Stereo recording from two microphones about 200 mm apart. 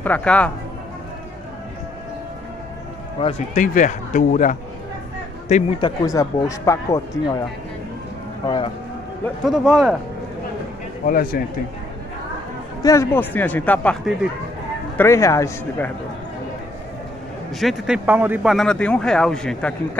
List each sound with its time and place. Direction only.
0.0 s speech: 5° left (ahead or behind)
3.2 s speech: 30° left (ahead or behind)
5.5 s speech: 25° left (ahead or behind)
8.5 s speech: 25° left (ahead or behind)
9.4 s speech: centre (ahead or behind)
11.1 s speech: 45° left (ahead or behind)
12.8 s speech: 15° left (ahead or behind)
15.0 s speech: 15° left (ahead or behind)
17.6 s speech: centre (ahead or behind)